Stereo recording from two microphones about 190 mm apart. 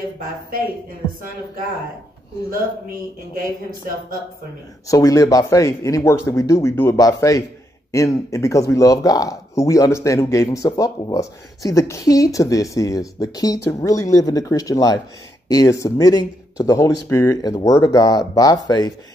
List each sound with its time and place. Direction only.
4.8 s speech: 20° left (ahead or behind)